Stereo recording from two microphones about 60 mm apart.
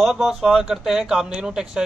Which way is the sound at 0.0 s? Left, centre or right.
Centre.